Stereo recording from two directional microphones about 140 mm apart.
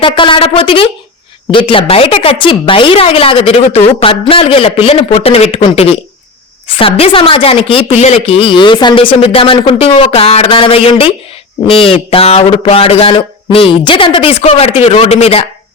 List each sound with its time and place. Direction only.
0.0 s a woman's voice: 40° left (ahead or behind)